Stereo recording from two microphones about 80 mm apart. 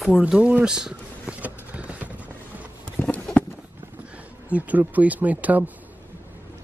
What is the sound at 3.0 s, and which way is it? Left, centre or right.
Clip-clop, centre.